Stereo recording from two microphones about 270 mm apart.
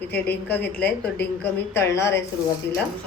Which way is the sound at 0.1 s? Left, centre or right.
Centre.